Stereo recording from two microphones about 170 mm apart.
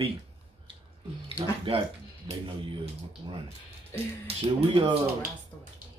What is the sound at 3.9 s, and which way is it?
Speech, 15° left (ahead or behind).